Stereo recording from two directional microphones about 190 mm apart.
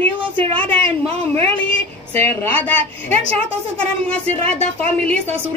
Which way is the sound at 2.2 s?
10° left (ahead or behind).